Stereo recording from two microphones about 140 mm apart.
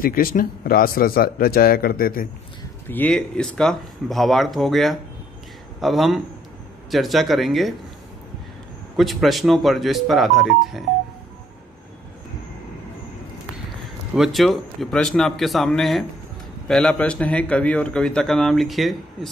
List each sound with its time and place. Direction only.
0.0 s speech: 90° left
2.9 s a man's voice: 10° left (ahead or behind)
8.9 s a man's voice: centre (ahead or behind)
14.1 s a man's voice: centre (ahead or behind)